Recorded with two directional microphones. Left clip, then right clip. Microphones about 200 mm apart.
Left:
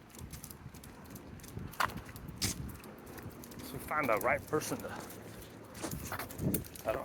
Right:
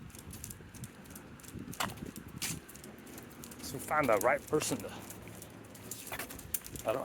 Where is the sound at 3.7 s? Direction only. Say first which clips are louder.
Right 3 dB; 40° right (ahead or behind).